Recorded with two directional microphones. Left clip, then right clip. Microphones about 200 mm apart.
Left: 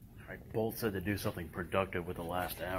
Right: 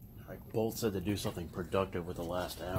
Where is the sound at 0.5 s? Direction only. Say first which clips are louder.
Right 1 dB; centre (ahead or behind).